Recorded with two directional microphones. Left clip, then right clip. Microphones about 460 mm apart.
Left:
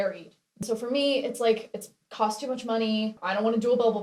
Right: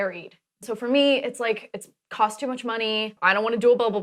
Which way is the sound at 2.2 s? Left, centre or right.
Right.